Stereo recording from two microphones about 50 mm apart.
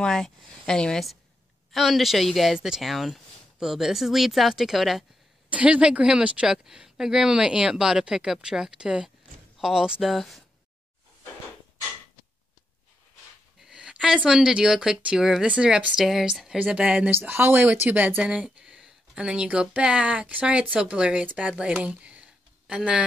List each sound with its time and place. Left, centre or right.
0.0 s speech: centre
1.7 s a woman's voice: centre
5.5 s a woman's voice: right
10.0 s a woman's voice: centre
13.6 s a sound: centre
14.0 s speech: centre
15.4 s a woman's voice: right
16.0 s a woman's voice: centre
17.1 s speech: right
17.9 s speech: right
18.2 s a woman's voice: centre